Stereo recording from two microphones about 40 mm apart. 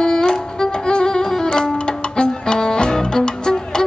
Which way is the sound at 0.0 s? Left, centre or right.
Centre.